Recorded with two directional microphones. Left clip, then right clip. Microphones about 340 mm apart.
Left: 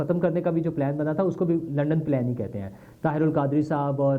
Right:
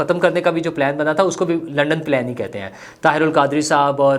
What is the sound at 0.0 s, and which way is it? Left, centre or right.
Speech, centre.